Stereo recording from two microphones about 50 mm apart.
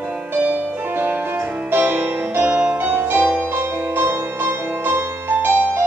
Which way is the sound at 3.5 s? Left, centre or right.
Right.